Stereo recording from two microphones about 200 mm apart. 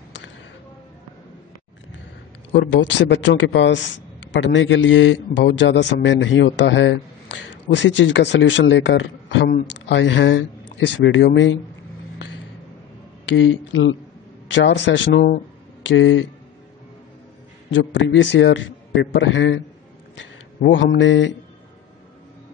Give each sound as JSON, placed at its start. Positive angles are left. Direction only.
{"t": 2.5, "sound": "speech", "side_deg": 65}
{"t": 13.2, "sound": "a man's voice", "side_deg": 70}
{"t": 17.6, "sound": "a man's voice", "side_deg": 70}